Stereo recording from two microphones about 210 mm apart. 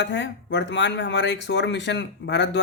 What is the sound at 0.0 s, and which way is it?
Speech, 55° left (ahead or behind).